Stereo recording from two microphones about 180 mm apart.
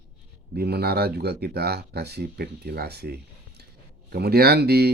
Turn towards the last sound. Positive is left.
turn(degrees=-65)  # may be behind; listen again after turning